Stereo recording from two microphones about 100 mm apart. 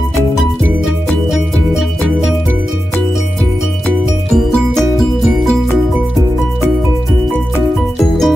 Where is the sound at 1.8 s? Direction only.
Centre (ahead or behind).